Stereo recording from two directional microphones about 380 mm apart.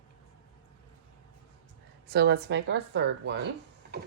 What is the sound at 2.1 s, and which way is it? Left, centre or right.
Speech, right.